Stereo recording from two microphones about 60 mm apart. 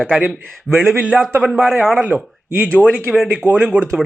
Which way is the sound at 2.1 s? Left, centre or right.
Right.